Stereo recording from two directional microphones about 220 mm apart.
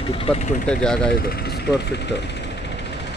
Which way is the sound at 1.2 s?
45° left (ahead or behind).